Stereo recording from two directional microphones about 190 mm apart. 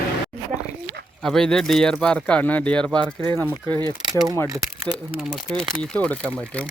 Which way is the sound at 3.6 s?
20° right (ahead or behind).